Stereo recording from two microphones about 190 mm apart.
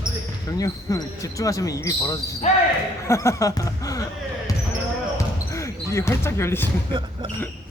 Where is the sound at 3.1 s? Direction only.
15° left (ahead or behind).